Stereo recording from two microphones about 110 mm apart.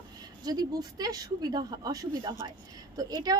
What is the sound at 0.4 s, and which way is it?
Speech, 35° right (ahead or behind).